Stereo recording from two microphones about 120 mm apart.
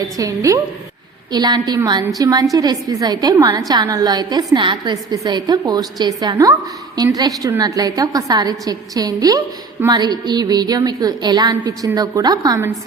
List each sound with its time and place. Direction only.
0.2 s a woman's voice: 30° right (ahead or behind)